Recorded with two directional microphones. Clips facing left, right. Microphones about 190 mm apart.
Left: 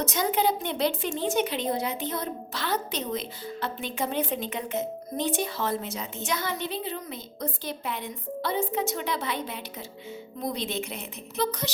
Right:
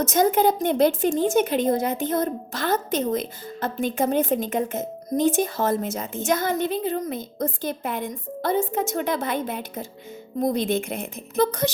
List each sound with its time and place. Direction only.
0.0 s a woman's voice: 45° right (ahead or behind)